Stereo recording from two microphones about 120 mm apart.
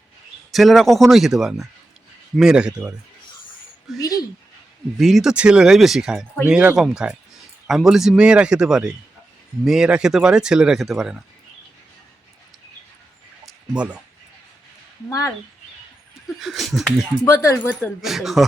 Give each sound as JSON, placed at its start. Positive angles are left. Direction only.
{"t": 0.5, "sound": "speech", "side_deg": 0}
{"t": 13.4, "sound": "a sound", "side_deg": -10}
{"t": 16.4, "sound": "speech", "side_deg": 0}
{"t": 17.2, "sound": "speech", "side_deg": 25}
{"t": 18.0, "sound": "speech", "side_deg": 0}